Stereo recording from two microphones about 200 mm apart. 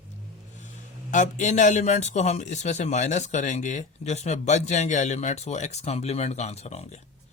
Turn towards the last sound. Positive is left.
turn(degrees=35)  # may be behind; listen again after turning